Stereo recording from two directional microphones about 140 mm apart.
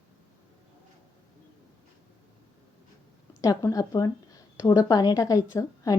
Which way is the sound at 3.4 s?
25° left (ahead or behind).